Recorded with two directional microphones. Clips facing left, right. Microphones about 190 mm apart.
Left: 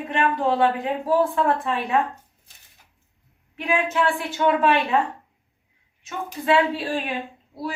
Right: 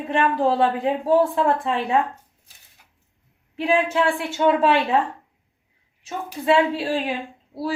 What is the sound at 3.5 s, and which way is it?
Speech, 30° right (ahead or behind).